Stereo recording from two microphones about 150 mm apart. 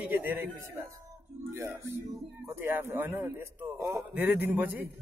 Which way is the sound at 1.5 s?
15° right (ahead or behind).